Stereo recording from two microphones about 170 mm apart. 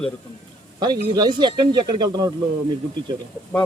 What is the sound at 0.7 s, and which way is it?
Speech, 25° right (ahead or behind).